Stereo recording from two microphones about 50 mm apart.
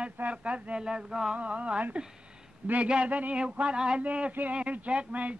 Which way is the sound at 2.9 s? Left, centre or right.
Right.